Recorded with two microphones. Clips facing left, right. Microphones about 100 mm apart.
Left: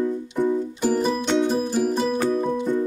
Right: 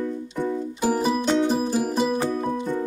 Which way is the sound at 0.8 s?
5° right (ahead or behind).